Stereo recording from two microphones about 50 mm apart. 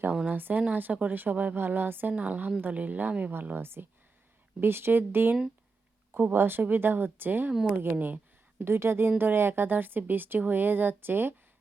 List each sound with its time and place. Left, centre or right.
0.3 s a woman's voice: right
2.1 s a woman's voice: right
3.4 s a woman's voice: right
8.5 s speech: right
9.0 s speech: right